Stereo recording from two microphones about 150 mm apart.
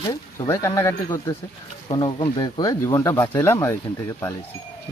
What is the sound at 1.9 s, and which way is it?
Speech, 30° left (ahead or behind).